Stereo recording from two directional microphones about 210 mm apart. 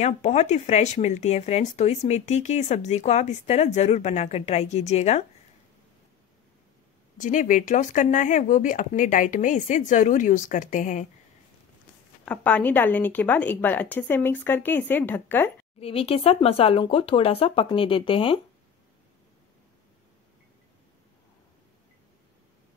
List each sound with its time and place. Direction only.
0.0 s speech: 30° left (ahead or behind)
7.2 s speech: 40° left (ahead or behind)
12.3 s a woman's voice: 5° left (ahead or behind)
15.8 s speech: 30° left (ahead or behind)